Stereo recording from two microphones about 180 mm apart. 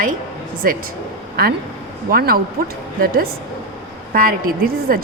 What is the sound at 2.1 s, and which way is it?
A woman's voice, 55° right (ahead or behind).